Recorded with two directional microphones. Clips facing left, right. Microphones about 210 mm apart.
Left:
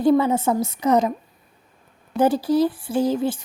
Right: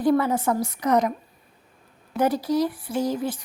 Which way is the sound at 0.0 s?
25° left (ahead or behind).